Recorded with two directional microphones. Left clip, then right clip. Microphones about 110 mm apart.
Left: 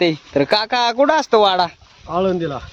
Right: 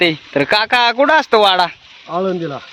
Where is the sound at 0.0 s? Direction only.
10° left (ahead or behind).